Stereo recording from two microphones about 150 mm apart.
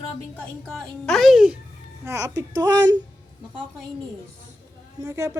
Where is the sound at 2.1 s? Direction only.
20° right (ahead or behind).